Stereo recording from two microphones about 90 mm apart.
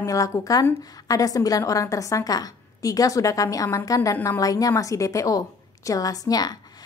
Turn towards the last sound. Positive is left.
turn(degrees=45)  # may be behind; listen again after turning